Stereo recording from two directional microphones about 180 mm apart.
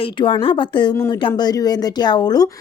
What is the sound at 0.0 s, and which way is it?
Speech, 25° left (ahead or behind).